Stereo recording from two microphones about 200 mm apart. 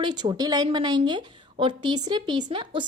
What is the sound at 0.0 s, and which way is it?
A woman's voice, 20° right (ahead or behind).